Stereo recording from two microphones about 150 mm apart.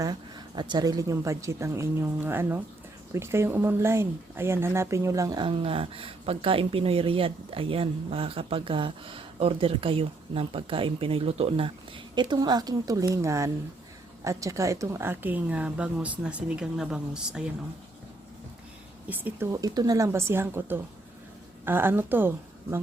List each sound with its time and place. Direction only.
0.0 s speech: 30° right (ahead or behind); by 17.4 s 5° right (ahead or behind)
19.0 s speech: 10° right (ahead or behind)